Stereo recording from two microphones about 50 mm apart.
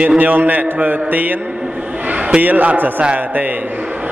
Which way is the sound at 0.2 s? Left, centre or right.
Right.